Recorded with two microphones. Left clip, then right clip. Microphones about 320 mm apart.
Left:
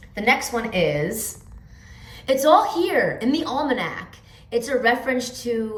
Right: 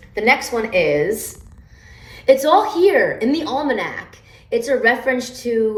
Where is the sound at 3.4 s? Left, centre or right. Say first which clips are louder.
Right 3 dB; right.